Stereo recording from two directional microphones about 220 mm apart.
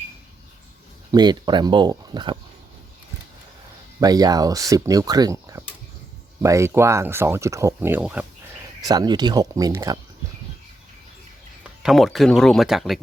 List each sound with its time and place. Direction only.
1.1 s speech: 20° right (ahead or behind)
4.0 s speech: 15° right (ahead or behind)
8.8 s speech: 15° right (ahead or behind)
11.6 s speech: centre (ahead or behind)